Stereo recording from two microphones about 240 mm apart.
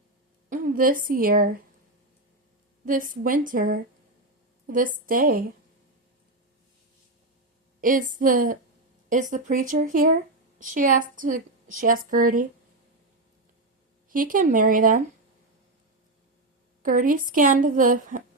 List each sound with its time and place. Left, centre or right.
0.5 s a woman's voice: right
2.8 s a woman's voice: right
7.8 s a woman's voice: right
14.1 s a woman's voice: right
16.8 s a woman's voice: right